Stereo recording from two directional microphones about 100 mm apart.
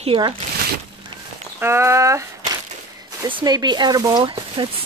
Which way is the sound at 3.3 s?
45° right (ahead or behind).